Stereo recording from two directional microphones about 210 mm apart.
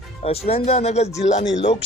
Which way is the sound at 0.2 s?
30° left (ahead or behind).